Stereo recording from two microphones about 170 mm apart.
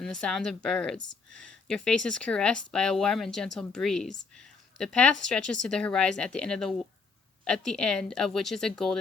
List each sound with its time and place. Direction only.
0.0 s speech: 5° left (ahead or behind)